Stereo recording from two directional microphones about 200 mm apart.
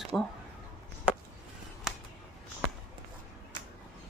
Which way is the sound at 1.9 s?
Centre (ahead or behind).